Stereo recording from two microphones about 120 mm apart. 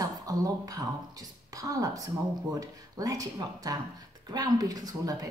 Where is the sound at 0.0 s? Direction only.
30° right (ahead or behind).